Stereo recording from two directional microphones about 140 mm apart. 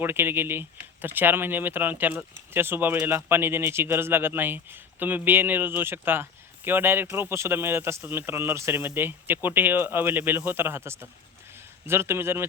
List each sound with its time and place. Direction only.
0.0 s speech: 15° right (ahead or behind)